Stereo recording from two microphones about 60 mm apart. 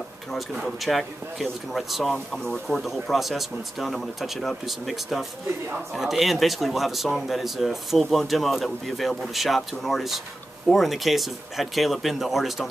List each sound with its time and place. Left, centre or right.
0.7 s speech: centre
2.1 s speech: centre
2.8 s speech: centre